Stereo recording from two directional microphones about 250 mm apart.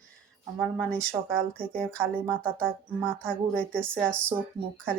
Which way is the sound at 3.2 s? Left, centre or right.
Centre.